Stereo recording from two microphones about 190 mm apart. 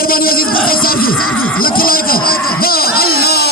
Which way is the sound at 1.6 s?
50° left (ahead or behind).